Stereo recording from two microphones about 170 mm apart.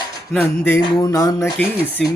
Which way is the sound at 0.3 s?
10° left (ahead or behind).